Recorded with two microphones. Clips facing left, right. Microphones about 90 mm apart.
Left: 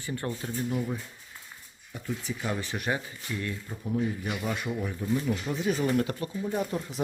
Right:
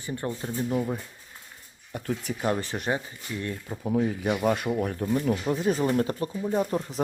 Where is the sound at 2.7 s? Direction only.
30° right (ahead or behind).